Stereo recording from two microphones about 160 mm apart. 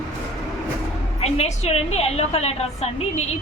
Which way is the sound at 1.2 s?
40° left (ahead or behind).